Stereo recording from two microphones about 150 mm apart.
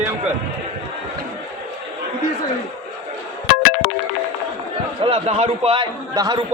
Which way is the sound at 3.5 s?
75° left (ahead or behind).